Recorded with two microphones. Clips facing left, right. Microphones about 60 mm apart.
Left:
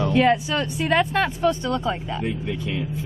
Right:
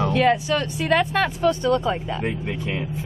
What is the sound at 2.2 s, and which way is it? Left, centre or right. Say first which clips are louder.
Speech: even; right.